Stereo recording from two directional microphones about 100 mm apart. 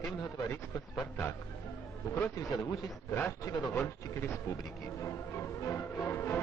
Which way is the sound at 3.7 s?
25° left (ahead or behind).